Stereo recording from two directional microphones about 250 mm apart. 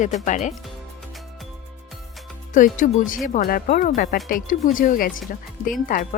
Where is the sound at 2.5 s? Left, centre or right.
Left.